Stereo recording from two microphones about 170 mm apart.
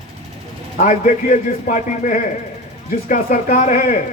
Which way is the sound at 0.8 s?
50° left (ahead or behind).